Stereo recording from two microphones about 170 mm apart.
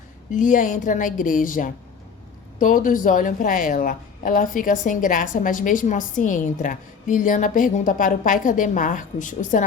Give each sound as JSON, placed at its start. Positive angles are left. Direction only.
{"t": 0.3, "sound": "a woman's voice", "side_deg": 50}